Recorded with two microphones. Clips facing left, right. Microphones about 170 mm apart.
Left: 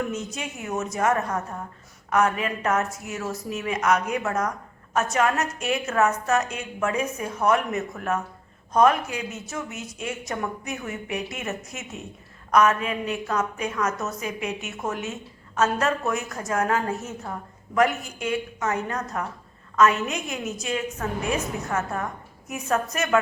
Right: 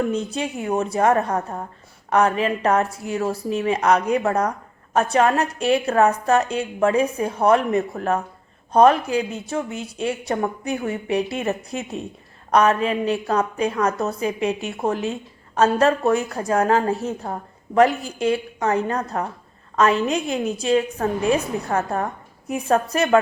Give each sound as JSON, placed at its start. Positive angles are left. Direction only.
{"t": 0.1, "sound": "a woman's voice", "side_deg": -30}